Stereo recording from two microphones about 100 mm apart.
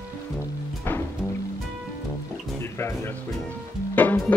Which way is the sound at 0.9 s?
20° left (ahead or behind).